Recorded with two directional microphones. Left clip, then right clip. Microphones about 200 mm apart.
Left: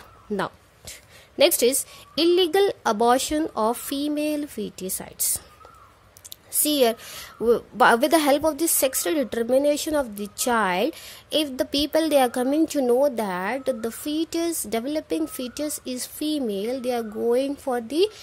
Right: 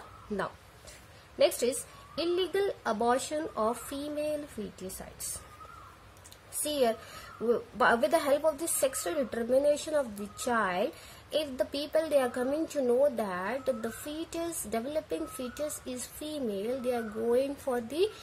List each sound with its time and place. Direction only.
1.4 s a woman's voice: 50° left (ahead or behind)
6.6 s a woman's voice: 50° left (ahead or behind)